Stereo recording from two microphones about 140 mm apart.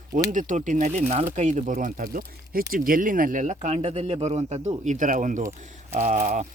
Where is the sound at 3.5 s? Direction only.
45° right (ahead or behind); by 6.4 s 80° right.